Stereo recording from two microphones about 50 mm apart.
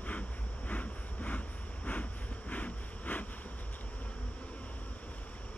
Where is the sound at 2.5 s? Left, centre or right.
Left.